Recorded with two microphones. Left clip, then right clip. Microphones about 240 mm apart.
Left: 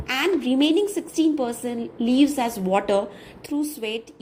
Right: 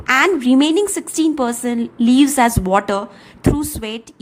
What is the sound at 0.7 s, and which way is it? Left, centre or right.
Speech, right.